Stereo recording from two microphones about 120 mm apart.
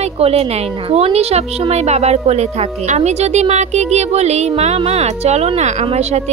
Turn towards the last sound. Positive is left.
turn(degrees=-65)  # may be behind; listen again after turning